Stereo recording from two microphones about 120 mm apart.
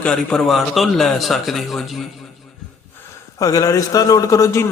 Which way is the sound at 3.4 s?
30° left (ahead or behind).